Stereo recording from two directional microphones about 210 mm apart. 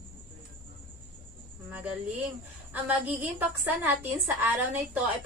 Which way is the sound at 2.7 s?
10° right (ahead or behind).